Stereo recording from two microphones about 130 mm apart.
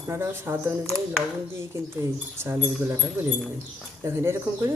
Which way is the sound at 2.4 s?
20° right (ahead or behind).